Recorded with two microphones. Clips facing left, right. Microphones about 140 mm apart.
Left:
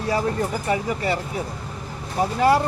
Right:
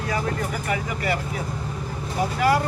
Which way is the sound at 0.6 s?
30° left (ahead or behind).